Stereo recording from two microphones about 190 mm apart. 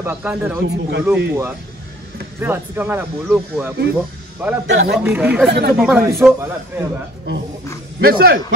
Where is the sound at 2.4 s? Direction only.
10° right (ahead or behind).